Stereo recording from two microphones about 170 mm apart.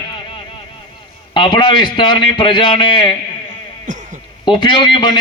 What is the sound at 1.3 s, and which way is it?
Speech, 25° left (ahead or behind).